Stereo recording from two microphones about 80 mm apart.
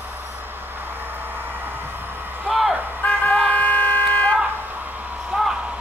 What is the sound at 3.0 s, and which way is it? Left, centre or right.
Vehicle, centre.